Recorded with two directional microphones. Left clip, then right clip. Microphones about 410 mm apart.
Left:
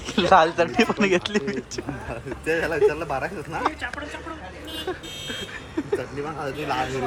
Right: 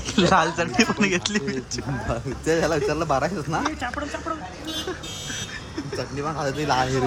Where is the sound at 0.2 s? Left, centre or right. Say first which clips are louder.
Left 3 dB; centre.